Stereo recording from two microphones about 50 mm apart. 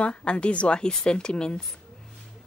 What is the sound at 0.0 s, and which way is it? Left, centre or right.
A woman's voice, left.